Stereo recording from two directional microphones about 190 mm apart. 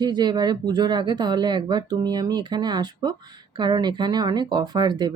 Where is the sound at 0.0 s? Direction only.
20° right (ahead or behind).